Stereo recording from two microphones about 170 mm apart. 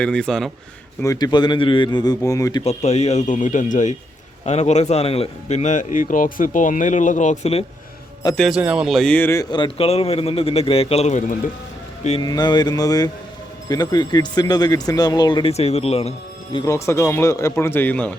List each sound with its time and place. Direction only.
0.0 s a man's voice: 5° left (ahead or behind)
1.0 s speech: 20° left (ahead or behind)
2.6 s speech: 40° left (ahead or behind)
8.4 s speech: 5° right (ahead or behind); by 11.3 s 45° left (ahead or behind)
12.2 s speech: 25° left (ahead or behind)
16.6 s speech: 15° left (ahead or behind)